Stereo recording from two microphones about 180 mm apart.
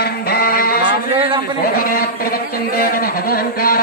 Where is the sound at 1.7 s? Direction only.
50° left (ahead or behind).